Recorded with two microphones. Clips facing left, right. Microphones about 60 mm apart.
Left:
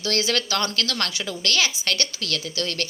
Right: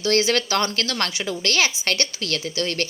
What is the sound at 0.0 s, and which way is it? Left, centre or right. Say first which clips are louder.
A woman's voice: right 4 dB; right.